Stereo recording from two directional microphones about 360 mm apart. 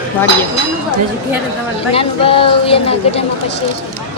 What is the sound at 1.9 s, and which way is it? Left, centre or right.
Speech, centre.